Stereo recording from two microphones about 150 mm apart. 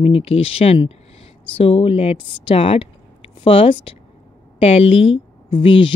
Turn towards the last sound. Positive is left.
turn(degrees=35)  # may be behind; listen again after turning